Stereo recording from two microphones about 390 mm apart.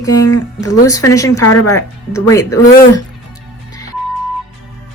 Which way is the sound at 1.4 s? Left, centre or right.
Left.